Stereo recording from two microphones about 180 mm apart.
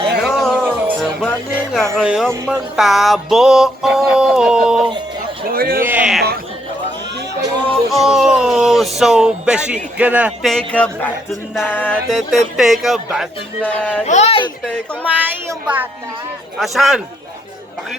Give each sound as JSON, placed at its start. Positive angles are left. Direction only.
{"t": 0.2, "sound": "music", "side_deg": 0}
{"t": 5.5, "sound": "a sound", "side_deg": -55}
{"t": 5.8, "sound": "a sound", "side_deg": -10}
{"t": 7.7, "sound": "music", "side_deg": 0}
{"t": 14.0, "sound": "speech", "side_deg": 40}
{"t": 15.4, "sound": "a woman's voice", "side_deg": -10}
{"t": 16.6, "sound": "music", "side_deg": 0}